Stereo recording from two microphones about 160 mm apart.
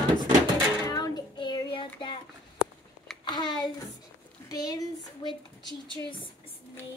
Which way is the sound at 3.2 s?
25° left (ahead or behind).